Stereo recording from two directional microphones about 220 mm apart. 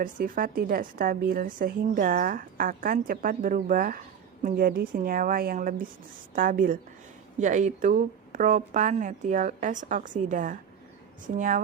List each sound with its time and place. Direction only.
0.0 s speech: 40° right (ahead or behind)